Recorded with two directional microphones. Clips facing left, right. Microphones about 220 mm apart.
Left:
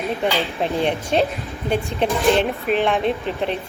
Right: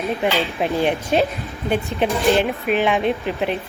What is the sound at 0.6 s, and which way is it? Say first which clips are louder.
A woman's voice: right 1 dB; 5° right (ahead or behind).